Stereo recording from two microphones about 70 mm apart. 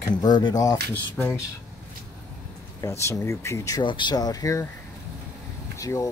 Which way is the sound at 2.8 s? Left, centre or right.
Left.